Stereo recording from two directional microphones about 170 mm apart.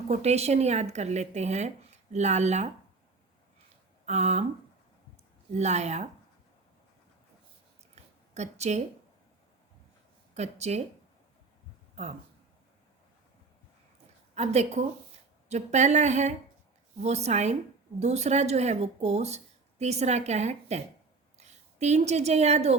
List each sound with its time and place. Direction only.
0.1 s speech: 40° right (ahead or behind)
4.0 s a sound: 40° right (ahead or behind)
5.5 s speech: 40° right (ahead or behind)
7.9 s a sound: 40° right (ahead or behind)
10.3 s speech: 40° right (ahead or behind)
12.0 s speech: 40° right (ahead or behind)
14.3 s a woman's voice: 40° right (ahead or behind)